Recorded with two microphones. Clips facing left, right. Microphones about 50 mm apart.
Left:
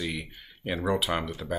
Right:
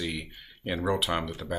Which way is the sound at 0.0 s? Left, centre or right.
Centre.